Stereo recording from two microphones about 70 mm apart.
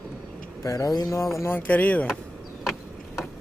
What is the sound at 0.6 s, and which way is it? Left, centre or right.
Speech, left.